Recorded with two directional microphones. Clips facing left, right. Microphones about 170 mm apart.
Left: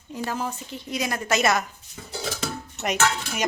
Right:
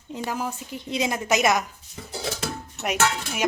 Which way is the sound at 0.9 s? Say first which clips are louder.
Right 2 dB; 25° right (ahead or behind).